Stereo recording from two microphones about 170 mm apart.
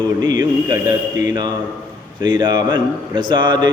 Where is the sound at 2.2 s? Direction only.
25° right (ahead or behind).